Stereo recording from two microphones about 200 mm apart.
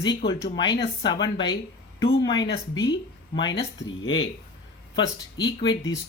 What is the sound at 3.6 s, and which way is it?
Speech, 65° left (ahead or behind).